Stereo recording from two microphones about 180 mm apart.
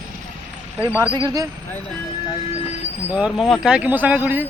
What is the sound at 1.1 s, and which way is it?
Speech, 20° right (ahead or behind).